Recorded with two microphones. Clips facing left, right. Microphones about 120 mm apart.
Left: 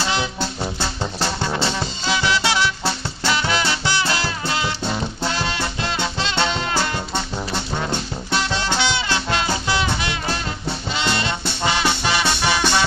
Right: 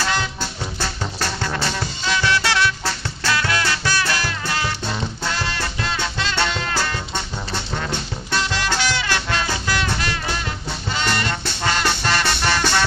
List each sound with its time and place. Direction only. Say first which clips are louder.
0.0 s music: left 1 dB; 20° left (ahead or behind)
8.3 s music: left 1 dB; 25° left (ahead or behind)